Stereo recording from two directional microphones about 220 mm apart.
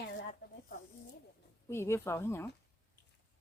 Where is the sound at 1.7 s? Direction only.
10° left (ahead or behind).